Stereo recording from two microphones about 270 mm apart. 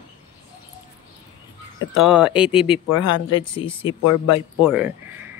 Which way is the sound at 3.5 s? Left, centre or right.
Centre.